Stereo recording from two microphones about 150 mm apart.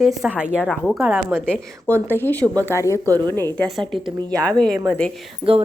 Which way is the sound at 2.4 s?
20° right (ahead or behind).